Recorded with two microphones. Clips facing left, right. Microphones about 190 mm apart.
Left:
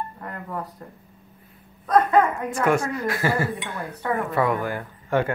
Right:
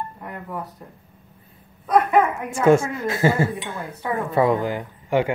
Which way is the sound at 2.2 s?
25° right (ahead or behind).